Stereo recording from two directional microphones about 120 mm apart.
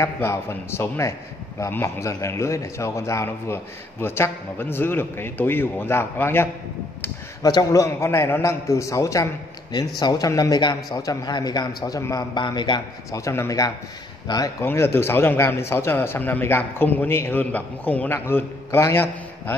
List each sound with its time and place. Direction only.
0.0 s a man's voice: 25° left (ahead or behind)
7.4 s a man's voice: 30° left (ahead or behind)
12.4 s a man's voice: 40° left (ahead or behind)
13.2 s a man's voice: 25° left (ahead or behind)
14.6 s a man's voice: 20° left (ahead or behind)